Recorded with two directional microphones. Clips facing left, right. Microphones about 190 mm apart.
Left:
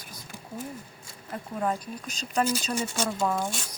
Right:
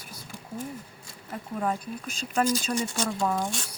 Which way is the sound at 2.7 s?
5° left (ahead or behind).